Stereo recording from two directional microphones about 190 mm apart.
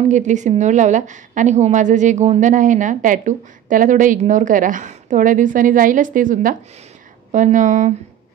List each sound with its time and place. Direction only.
0.1 s a woman's voice: 40° right (ahead or behind)